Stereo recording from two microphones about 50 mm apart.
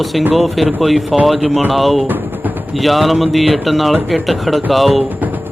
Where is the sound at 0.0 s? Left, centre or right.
Centre.